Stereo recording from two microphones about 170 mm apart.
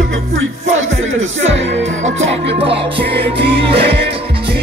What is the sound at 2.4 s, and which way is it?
Music, 85° right.